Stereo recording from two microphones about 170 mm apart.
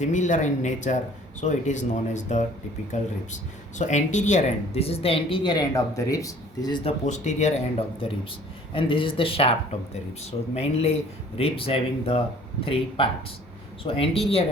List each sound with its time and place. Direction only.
0.0 s speech: 45° left (ahead or behind); by 6.9 s 25° left (ahead or behind)
7.0 s speech: 45° left (ahead or behind)